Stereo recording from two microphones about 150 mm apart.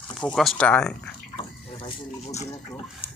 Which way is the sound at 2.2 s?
50° left (ahead or behind).